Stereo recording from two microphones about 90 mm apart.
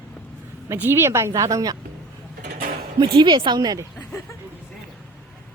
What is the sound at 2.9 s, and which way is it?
Speech, 65° right (ahead or behind).